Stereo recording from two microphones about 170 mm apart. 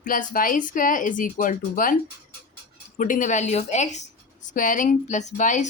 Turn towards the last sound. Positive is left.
turn(degrees=45)  # may be behind; listen again after turning